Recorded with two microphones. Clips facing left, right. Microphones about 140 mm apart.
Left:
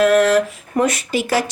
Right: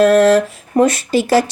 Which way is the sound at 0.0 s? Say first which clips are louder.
Right 3 dB; 30° right (ahead or behind).